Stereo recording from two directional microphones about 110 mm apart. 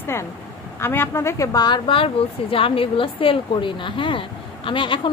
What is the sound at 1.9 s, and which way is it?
Speech, 55° left (ahead or behind).